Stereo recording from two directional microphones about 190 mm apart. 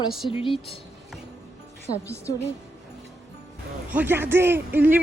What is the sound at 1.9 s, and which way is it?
Speech, 50° left (ahead or behind).